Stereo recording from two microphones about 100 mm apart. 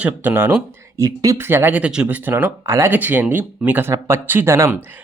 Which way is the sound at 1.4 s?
20° right (ahead or behind).